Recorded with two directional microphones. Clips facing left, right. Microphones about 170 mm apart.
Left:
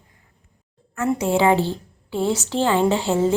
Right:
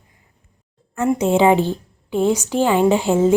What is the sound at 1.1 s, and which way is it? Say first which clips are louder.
Speech: right 3 dB; 20° right (ahead or behind).